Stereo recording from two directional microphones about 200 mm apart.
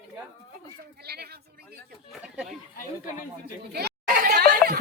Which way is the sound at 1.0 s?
55° right (ahead or behind).